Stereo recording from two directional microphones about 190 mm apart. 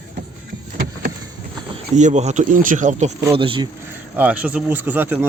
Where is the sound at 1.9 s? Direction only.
40° right (ahead or behind).